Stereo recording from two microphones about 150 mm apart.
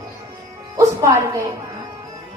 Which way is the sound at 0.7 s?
20° right (ahead or behind).